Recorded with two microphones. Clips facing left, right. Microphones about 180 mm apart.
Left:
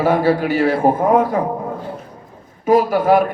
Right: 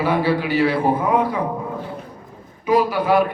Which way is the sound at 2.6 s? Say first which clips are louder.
Left 4 dB; 45° left (ahead or behind).